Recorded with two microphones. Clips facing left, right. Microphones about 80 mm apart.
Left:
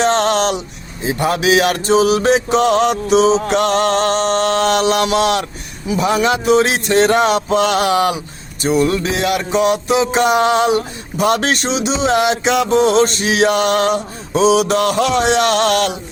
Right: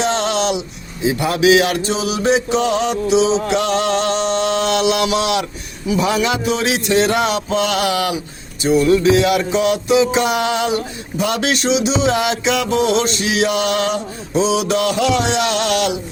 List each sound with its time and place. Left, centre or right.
0.0 s music: left
1.9 s music: left
3.4 s music: left